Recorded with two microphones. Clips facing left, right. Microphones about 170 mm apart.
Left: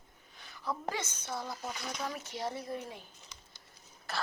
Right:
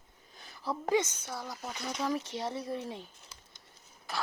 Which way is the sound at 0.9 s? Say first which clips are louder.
Right 8 dB; 15° right (ahead or behind).